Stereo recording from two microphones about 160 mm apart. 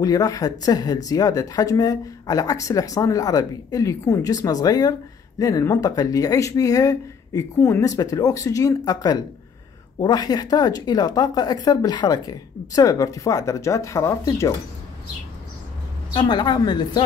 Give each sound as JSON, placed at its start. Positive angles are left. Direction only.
{"t": 0.0, "sound": "speech", "side_deg": 20}
{"t": 16.1, "sound": "speech", "side_deg": 30}